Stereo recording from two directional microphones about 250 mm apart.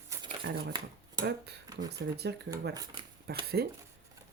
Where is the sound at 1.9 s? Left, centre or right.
Right.